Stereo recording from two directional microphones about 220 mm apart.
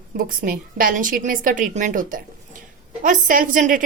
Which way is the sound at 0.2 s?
40° right (ahead or behind).